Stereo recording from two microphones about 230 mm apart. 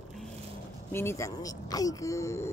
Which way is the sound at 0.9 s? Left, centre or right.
Centre.